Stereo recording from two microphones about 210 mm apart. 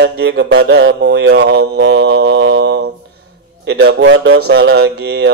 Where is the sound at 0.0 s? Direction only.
55° right (ahead or behind).